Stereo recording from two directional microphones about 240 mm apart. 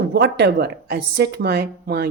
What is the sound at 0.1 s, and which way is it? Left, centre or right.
Speech, right.